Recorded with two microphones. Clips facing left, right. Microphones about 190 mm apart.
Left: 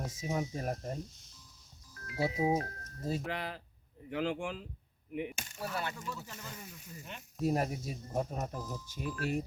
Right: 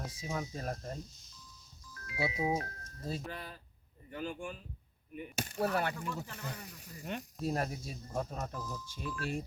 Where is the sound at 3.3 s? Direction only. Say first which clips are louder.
Left 6 dB; 90° left.